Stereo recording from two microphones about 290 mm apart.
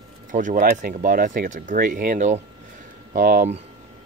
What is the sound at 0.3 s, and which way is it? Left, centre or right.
Speech, right.